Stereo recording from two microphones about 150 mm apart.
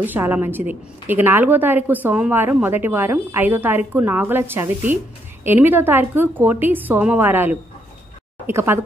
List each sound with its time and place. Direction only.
0.0 s a woman's voice: 10° right (ahead or behind)